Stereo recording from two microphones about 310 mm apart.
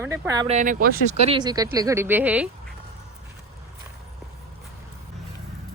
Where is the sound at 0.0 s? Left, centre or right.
Centre; by 0.9 s right.